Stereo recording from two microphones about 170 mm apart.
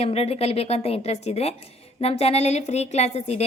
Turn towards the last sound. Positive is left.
turn(degrees=40)  # may be behind; listen again after turning